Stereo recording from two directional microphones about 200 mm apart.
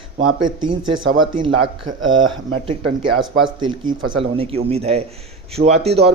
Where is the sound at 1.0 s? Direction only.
80° right.